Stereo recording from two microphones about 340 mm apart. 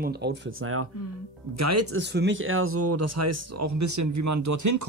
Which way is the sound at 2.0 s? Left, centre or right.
Right.